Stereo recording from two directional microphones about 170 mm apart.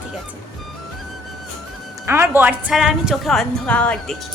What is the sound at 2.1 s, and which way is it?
A woman's voice, 15° right (ahead or behind).